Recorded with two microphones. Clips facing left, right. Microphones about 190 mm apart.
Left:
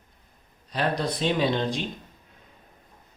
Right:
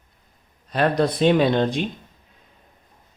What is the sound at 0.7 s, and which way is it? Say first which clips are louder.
Speech: right 7 dB; 55° right (ahead or behind).